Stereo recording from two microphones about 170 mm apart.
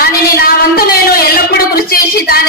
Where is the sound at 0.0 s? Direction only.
60° left (ahead or behind).